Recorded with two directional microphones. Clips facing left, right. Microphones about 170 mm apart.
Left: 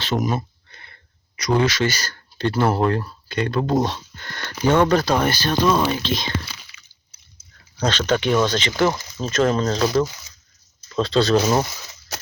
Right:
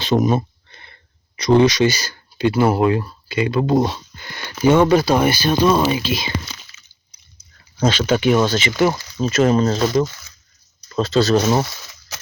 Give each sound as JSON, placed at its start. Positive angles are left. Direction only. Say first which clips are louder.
{"t": 0.0, "sound": "a sound", "louder": "right 6 dB", "side_deg": -20}
{"t": 1.4, "sound": "speech", "louder": "right 6 dB", "side_deg": -25}
{"t": 7.8, "sound": "speech", "louder": "right 3 dB", "side_deg": -10}
{"t": 10.9, "sound": "speech", "louder": "right 2 dB", "side_deg": -5}